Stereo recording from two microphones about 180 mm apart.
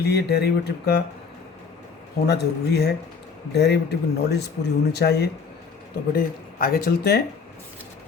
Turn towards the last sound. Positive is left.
turn(degrees=60)  # may be behind; listen again after turning